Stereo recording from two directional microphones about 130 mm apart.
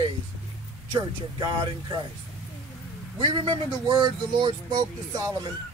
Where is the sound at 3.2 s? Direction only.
35° right (ahead or behind).